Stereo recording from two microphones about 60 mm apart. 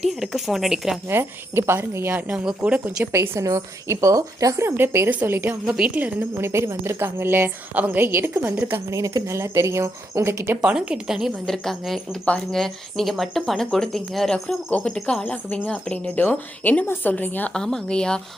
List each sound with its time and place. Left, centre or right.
0.1 s speech: centre
1.1 s speech: right
2.3 s speech: centre
2.6 s speech: right
3.1 s speech: right
4.6 s speech: right
5.6 s speech: centre
5.9 s speech: right
6.3 s a woman's voice: right
8.9 s speech: right
10.6 s speech: centre
11.4 s a woman's voice: centre; by 17.5 s left
17.5 s speech: centre